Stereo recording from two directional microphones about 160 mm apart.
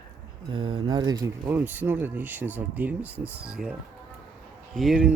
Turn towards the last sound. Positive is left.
turn(degrees=0)  # may be behind; listen again after turning